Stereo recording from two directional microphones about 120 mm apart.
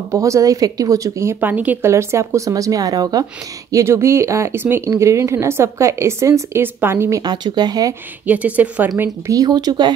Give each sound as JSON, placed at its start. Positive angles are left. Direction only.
{"t": 0.1, "sound": "speech", "side_deg": -25}
{"t": 3.7, "sound": "speech", "side_deg": -20}
{"t": 8.3, "sound": "a woman's voice", "side_deg": -15}
{"t": 9.3, "sound": "speech", "side_deg": -30}